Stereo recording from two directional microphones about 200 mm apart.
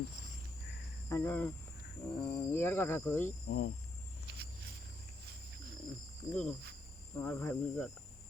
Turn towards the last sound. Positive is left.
turn(degrees=10)  # may be behind; listen again after turning